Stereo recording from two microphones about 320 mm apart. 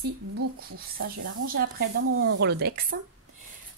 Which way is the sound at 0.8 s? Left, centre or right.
Right.